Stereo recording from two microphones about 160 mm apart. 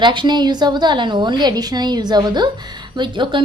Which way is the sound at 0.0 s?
30° right (ahead or behind).